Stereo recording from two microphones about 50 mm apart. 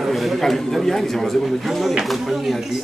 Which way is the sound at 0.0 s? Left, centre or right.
Centre.